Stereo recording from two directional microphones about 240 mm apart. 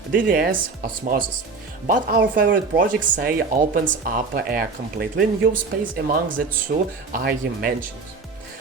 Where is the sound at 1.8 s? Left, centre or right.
Right.